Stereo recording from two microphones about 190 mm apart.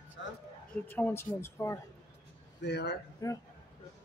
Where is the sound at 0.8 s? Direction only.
10° left (ahead or behind).